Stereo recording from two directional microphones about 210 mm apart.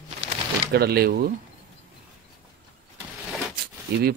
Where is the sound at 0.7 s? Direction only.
50° right (ahead or behind).